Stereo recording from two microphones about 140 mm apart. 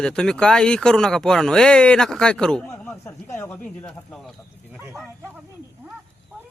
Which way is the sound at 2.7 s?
5° left (ahead or behind).